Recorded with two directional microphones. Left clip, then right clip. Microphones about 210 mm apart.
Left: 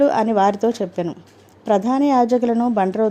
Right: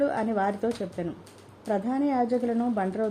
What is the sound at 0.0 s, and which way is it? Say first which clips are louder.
Speech: left 10 dB; 20° left (ahead or behind).